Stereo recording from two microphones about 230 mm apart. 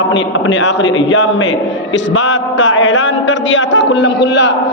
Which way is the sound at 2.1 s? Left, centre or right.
Left.